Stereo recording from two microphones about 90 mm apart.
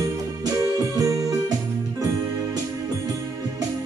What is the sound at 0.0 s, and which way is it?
Music, 40° right (ahead or behind).